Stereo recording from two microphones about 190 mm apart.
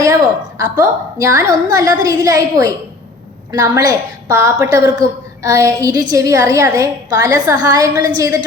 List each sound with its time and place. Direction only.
0.6 s a woman's voice: 15° right (ahead or behind)